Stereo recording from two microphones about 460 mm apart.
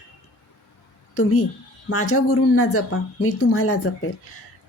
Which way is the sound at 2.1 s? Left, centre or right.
Left.